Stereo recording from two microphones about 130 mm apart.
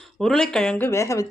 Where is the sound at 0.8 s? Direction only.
20° left (ahead or behind).